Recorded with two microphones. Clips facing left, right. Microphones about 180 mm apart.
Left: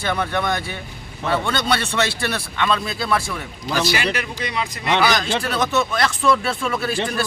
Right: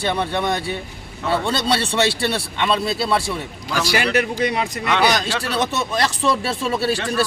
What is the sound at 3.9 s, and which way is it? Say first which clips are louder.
Speech: right 4 dB; 50° right (ahead or behind).